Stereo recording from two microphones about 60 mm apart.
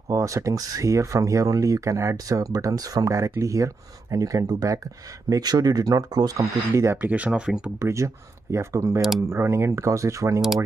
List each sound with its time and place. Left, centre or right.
0.1 s speech: right
3.3 s speech: right
5.3 s speech: right
6.7 s speech: right
7.0 s speech: right
7.8 s speech: right